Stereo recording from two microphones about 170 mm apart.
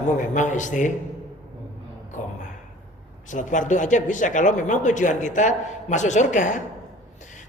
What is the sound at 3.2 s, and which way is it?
Speech, 50° left (ahead or behind).